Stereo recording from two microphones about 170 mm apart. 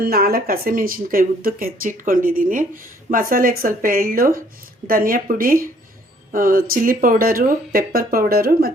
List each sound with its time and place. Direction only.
0.0 s speech: 60° right (ahead or behind)